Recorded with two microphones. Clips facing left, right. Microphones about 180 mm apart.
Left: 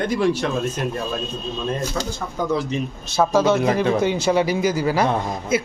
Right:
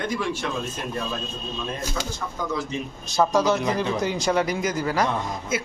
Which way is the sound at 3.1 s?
Centre (ahead or behind).